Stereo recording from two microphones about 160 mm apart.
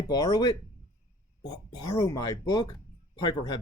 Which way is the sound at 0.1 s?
25° left (ahead or behind).